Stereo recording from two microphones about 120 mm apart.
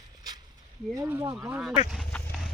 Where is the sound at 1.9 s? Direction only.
Centre (ahead or behind).